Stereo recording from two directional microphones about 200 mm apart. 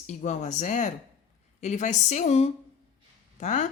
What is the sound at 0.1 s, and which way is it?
Speech, 35° left (ahead or behind).